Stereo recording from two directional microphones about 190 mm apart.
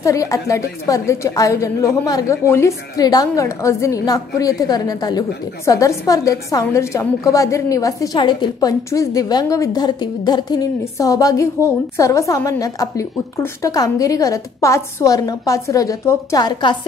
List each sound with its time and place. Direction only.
0.0 s a woman's voice: 15° left (ahead or behind)